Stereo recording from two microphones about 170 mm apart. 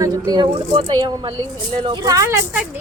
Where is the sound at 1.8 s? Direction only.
20° right (ahead or behind).